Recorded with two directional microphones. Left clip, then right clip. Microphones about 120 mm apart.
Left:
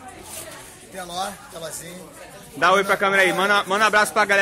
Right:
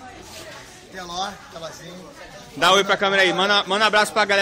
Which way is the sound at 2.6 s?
20° right (ahead or behind).